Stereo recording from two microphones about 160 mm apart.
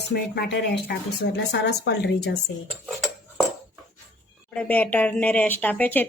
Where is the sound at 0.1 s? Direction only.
90° left.